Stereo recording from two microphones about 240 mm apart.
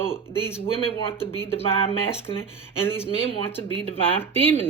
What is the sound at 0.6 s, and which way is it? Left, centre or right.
Speech, left.